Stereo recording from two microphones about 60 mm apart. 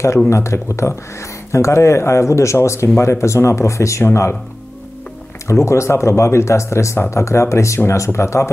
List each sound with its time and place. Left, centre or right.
0.3 s speech: left
4.0 s speech: left
5.5 s speech: left